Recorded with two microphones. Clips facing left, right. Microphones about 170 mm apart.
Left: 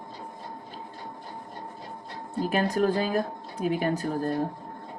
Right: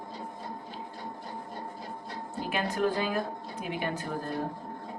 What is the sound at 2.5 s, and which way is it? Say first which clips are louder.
Speech: left 4 dB; 40° left (ahead or behind).